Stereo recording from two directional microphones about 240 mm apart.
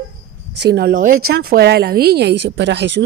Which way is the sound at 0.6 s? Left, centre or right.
Right.